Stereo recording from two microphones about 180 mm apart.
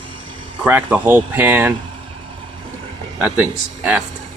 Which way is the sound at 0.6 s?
10° right (ahead or behind).